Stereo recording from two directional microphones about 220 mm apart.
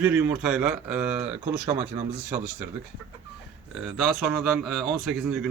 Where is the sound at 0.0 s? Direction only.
5° right (ahead or behind).